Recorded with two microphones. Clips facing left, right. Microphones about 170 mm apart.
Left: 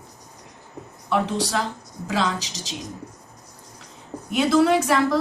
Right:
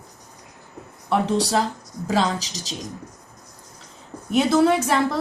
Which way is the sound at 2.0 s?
35° right (ahead or behind).